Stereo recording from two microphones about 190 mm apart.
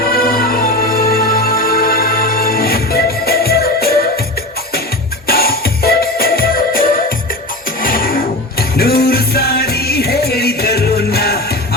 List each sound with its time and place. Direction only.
0.0 s music: 50° left (ahead or behind)
5.3 s music: 55° left (ahead or behind)